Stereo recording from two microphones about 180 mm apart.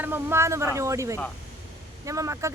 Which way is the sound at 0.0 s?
10° right (ahead or behind).